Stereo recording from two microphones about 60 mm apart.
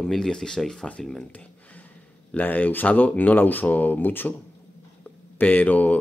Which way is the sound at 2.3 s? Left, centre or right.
Left.